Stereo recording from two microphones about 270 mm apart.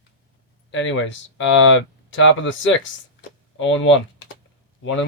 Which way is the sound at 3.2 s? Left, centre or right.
Left.